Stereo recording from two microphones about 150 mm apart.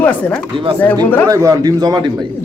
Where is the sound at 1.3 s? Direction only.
20° right (ahead or behind).